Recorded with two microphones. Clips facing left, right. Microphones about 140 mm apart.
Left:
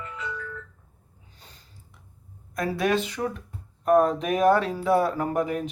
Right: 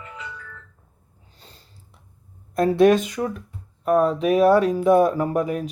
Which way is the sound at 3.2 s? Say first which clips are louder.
Right 3 dB; 5° left (ahead or behind).